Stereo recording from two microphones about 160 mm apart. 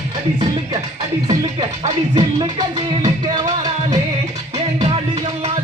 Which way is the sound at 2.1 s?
25° right (ahead or behind).